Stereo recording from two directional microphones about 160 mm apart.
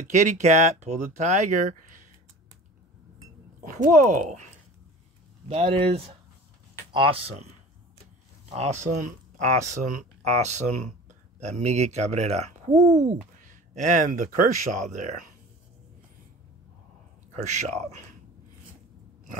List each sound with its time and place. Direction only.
0.0 s speech: 45° right (ahead or behind)
3.6 s speech: 55° right (ahead or behind)
5.5 s speech: 35° right (ahead or behind)
8.5 s speech: 45° right (ahead or behind)
17.5 s speech: 50° right (ahead or behind)